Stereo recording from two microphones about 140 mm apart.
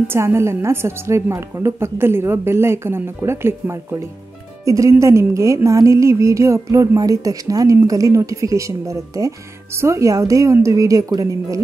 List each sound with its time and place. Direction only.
0.1 s a woman's voice: 20° right (ahead or behind)